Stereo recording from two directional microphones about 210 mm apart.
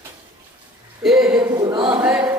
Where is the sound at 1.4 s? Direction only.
20° right (ahead or behind).